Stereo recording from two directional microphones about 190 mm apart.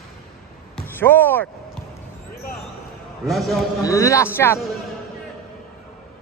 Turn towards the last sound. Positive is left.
turn(degrees=10)  # may be behind; listen again after turning